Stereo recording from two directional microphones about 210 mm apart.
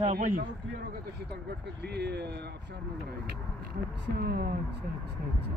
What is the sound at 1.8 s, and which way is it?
Speech, 50° right (ahead or behind).